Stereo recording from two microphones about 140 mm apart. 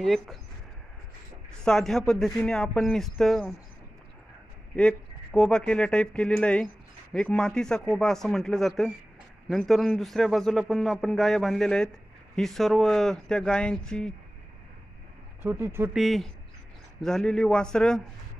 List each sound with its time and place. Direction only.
0.0 s a man's voice: centre (ahead or behind)
1.6 s a man's voice: 5° left (ahead or behind)
4.7 s a man's voice: 5° left (ahead or behind)
15.4 s speech: 15° right (ahead or behind)
15.9 s a man's voice: centre (ahead or behind)